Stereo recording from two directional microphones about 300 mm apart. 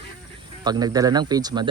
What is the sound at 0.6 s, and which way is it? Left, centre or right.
Speech, centre.